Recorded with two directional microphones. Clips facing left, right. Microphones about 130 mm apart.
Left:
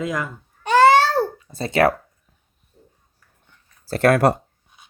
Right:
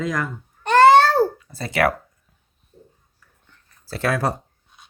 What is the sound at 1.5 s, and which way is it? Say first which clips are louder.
Speech: left 3 dB; 25° left (ahead or behind).